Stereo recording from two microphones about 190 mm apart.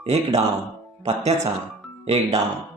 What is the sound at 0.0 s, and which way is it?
Speech, 35° right (ahead or behind).